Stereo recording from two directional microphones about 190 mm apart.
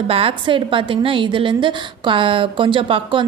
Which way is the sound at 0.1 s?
30° right (ahead or behind).